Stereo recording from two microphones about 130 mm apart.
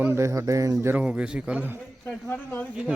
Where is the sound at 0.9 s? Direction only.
10° right (ahead or behind).